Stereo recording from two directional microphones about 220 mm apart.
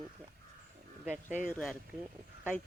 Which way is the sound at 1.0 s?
5° right (ahead or behind).